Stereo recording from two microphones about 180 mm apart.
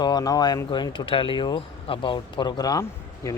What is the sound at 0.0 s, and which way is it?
Speech, 20° left (ahead or behind).